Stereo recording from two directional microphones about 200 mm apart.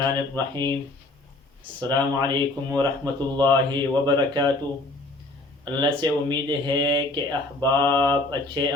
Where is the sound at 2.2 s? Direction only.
20° right (ahead or behind).